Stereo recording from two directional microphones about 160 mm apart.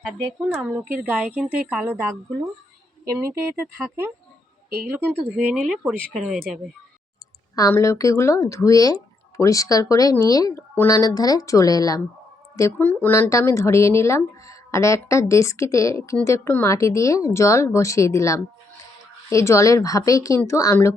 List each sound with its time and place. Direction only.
0.4 s a woman's voice: 10° right (ahead or behind)
3.1 s a woman's voice: 20° right (ahead or behind)
5.5 s speech: centre (ahead or behind)
7.5 s speech: 20° left (ahead or behind)